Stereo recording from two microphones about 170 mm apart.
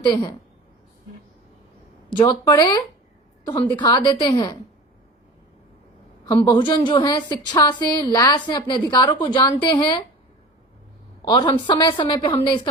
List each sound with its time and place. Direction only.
0.0 s a woman's voice: 25° left (ahead or behind)
2.1 s a woman's voice: 25° left (ahead or behind)
6.2 s a woman's voice: 25° left (ahead or behind)
11.3 s a woman's voice: 25° left (ahead or behind)